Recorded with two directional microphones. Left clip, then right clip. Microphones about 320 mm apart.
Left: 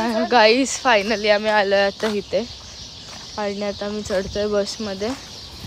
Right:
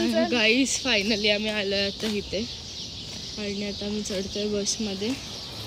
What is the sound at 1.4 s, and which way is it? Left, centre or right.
Speech, left.